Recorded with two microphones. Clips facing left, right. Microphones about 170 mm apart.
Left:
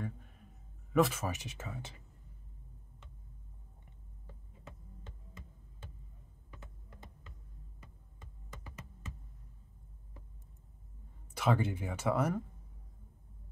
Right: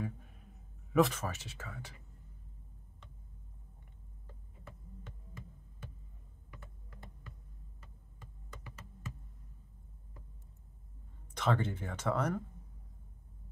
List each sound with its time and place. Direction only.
0.9 s speech: 5° left (ahead or behind); by 2.0 s 20° left (ahead or behind)
6.5 s typing: 25° left (ahead or behind)
11.3 s speech: 10° left (ahead or behind)